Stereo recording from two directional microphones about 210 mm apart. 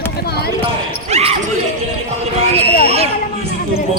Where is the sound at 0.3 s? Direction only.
50° left (ahead or behind).